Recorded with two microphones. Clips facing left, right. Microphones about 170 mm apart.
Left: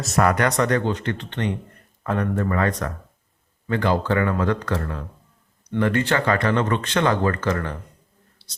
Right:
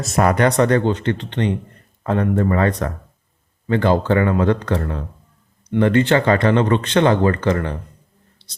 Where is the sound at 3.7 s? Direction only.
30° right (ahead or behind).